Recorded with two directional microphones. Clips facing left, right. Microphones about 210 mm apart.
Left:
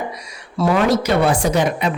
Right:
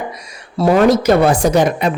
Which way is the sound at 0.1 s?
45° right (ahead or behind).